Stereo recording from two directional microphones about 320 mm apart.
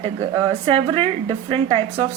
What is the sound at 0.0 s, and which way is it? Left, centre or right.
Speech, centre.